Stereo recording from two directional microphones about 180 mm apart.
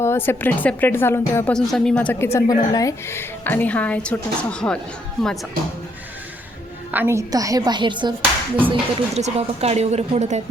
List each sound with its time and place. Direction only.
0.0 s a woman's voice: 15° left (ahead or behind)
6.9 s a woman's voice: 15° right (ahead or behind); by 10.4 s 40° right (ahead or behind)